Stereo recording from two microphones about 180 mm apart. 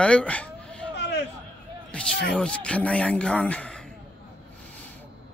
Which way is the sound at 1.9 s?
5° left (ahead or behind).